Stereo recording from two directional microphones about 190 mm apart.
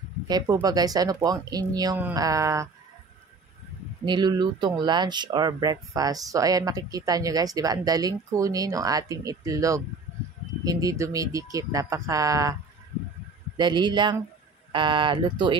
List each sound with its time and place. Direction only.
0.3 s speech: 20° right (ahead or behind)
4.0 s speech: 25° right (ahead or behind)
13.6 s speech: 25° right (ahead or behind)